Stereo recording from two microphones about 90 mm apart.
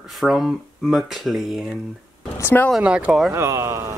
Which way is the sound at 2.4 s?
25° left (ahead or behind).